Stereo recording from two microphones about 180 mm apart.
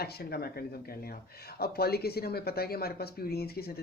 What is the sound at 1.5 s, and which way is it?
Speech, 60° left (ahead or behind).